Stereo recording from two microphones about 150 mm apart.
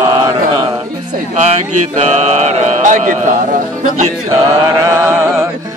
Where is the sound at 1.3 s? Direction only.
50° right (ahead or behind).